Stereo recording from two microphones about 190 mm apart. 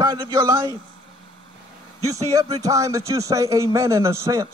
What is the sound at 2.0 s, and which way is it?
A man's voice, 15° right (ahead or behind).